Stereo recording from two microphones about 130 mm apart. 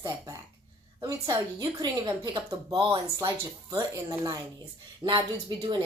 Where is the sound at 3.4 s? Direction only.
25° right (ahead or behind).